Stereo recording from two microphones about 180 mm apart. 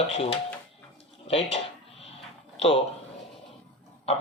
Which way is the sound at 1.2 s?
35° left (ahead or behind).